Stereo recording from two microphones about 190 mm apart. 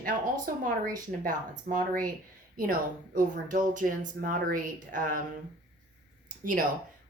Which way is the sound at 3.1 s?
45° right (ahead or behind).